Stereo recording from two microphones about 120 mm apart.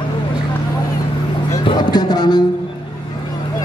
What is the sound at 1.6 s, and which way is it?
Music, 35° left (ahead or behind).